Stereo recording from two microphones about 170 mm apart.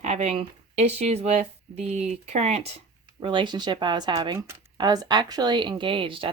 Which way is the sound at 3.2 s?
30° right (ahead or behind).